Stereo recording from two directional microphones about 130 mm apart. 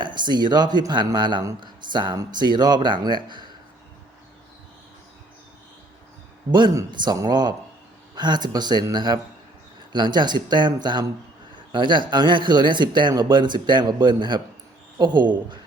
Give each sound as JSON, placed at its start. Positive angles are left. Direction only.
{"t": 0.0, "sound": "speech", "side_deg": -35}
{"t": 6.5, "sound": "speech", "side_deg": -35}
{"t": 11.7, "sound": "speech", "side_deg": -35}